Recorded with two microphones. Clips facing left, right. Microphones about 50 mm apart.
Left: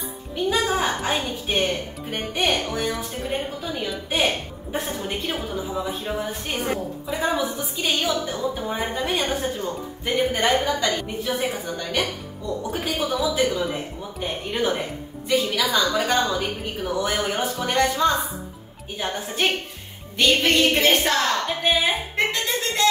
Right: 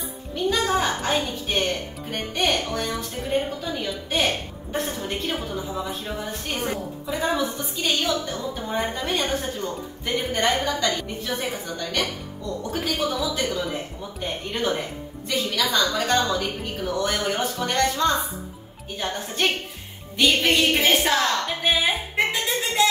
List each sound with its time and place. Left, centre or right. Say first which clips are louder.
0.5 s speech: even; centre
20.2 s speech: left 1 dB; centre
22.1 s music: even; centre